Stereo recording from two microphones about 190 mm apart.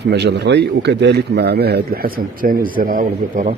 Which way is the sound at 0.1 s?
60° right (ahead or behind).